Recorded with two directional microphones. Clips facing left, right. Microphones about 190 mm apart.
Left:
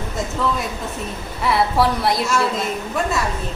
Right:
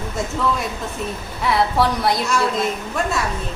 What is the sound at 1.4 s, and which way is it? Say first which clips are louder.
A woman's voice: left 1 dB; centre (ahead or behind).